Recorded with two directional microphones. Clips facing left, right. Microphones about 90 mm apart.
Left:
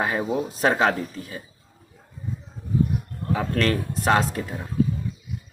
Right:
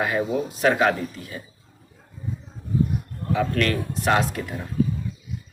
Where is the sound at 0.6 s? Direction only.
30° left (ahead or behind).